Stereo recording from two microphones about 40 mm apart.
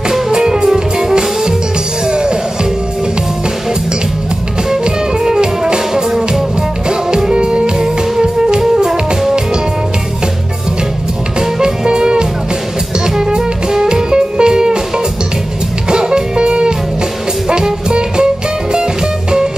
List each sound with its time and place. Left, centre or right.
0.3 s music: centre
4.8 s music: centre
11.6 s music: centre
15.9 s music: centre